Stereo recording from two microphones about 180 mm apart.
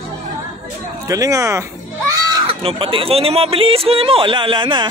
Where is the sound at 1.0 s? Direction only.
20° right (ahead or behind).